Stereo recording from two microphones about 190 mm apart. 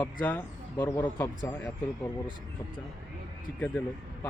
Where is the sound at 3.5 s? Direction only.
10° left (ahead or behind).